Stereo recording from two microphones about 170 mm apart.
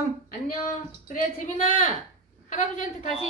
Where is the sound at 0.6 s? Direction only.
50° left (ahead or behind).